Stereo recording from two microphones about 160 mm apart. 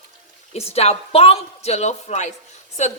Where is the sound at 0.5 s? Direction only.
40° left (ahead or behind).